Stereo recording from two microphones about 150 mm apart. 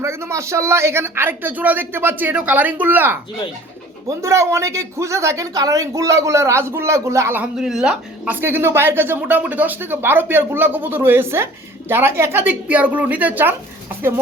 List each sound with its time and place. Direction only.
0.0 s speech: 20° right (ahead or behind)
4.2 s speech: 20° right (ahead or behind)